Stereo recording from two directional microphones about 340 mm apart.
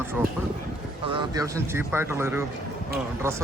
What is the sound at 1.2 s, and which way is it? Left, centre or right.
Speech, centre.